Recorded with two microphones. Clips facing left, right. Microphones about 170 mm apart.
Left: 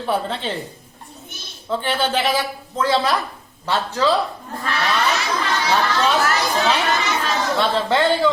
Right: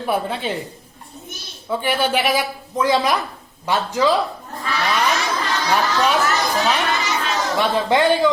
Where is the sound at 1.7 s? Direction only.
10° right (ahead or behind).